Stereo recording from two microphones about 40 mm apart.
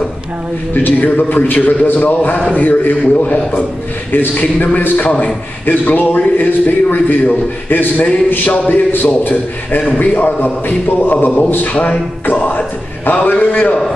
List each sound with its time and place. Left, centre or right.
0.8 s a man's voice: left
4.1 s a man's voice: left
8.5 s a man's voice: left
8.9 s a man's voice: left